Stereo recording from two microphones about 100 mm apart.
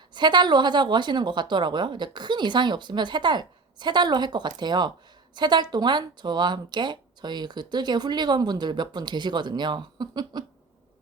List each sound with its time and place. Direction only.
0.1 s a woman's voice: 50° right (ahead or behind)